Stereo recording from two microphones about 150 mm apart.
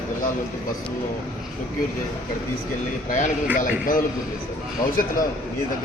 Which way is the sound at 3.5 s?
65° left (ahead or behind).